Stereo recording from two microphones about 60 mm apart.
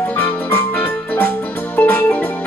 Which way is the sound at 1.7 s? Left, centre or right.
Left.